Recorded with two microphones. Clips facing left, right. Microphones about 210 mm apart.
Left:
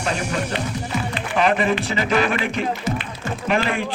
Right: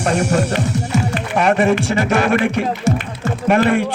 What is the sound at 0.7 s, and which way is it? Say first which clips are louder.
Music: right 6 dB; 85° right.